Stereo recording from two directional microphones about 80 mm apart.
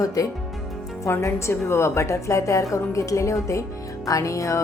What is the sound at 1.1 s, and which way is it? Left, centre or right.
Speech, left.